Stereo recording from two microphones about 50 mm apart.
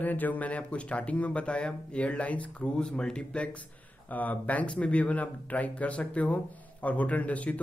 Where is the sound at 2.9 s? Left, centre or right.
Centre.